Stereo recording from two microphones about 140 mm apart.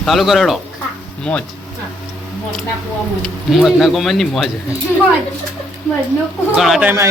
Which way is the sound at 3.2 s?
Centre (ahead or behind).